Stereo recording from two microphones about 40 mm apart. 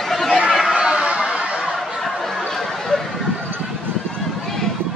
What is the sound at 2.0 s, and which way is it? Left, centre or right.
Chatter, centre.